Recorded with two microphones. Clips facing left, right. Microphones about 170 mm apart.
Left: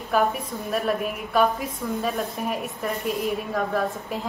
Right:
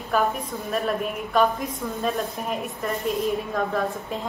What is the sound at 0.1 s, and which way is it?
A woman's voice, centre (ahead or behind).